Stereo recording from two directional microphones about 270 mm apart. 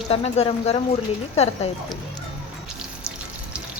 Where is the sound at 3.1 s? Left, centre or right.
Centre.